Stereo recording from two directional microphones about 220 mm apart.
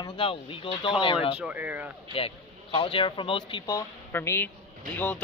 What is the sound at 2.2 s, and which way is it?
A man's voice, 25° left (ahead or behind).